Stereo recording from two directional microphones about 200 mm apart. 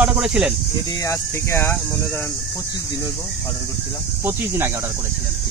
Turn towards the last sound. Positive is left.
turn(degrees=-10)  # may be behind; listen again after turning